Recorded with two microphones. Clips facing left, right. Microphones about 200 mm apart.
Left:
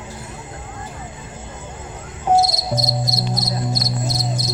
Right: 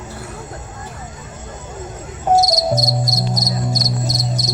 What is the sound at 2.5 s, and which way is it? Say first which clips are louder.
Cricket: right 5 dB; 45° right (ahead or behind).